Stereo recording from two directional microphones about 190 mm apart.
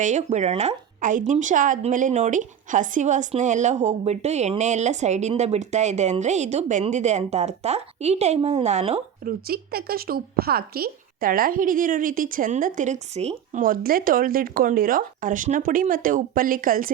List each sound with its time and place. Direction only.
0.0 s a woman's voice: 40° right (ahead or behind)
9.2 s a woman's voice: 55° right (ahead or behind)